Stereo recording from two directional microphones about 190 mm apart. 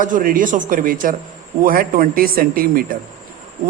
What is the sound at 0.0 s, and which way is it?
A man's voice, 45° right (ahead or behind).